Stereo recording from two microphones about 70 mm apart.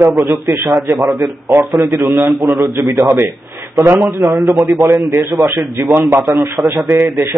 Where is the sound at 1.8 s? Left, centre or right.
Right.